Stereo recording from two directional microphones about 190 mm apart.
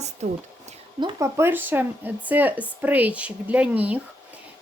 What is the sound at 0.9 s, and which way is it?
Speech, 20° right (ahead or behind).